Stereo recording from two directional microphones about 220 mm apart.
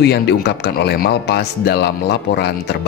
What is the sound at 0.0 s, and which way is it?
Speech, 50° left (ahead or behind).